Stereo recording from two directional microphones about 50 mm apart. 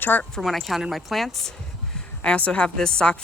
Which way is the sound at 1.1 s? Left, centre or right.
Centre.